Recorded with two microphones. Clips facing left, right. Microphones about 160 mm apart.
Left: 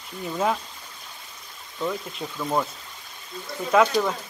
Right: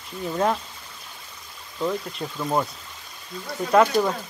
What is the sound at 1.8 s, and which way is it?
Speech, 5° right (ahead or behind).